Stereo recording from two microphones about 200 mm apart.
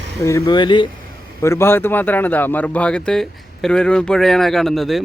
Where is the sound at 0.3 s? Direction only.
20° left (ahead or behind).